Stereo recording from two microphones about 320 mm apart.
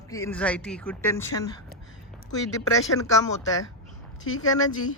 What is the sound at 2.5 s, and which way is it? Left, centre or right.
Speech, centre.